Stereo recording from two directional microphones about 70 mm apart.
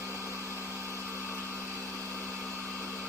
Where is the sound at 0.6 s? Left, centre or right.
Right.